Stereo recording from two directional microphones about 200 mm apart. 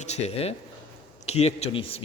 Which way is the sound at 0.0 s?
35° left (ahead or behind).